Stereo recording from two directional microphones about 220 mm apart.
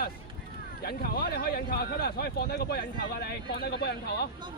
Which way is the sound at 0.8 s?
45° left (ahead or behind).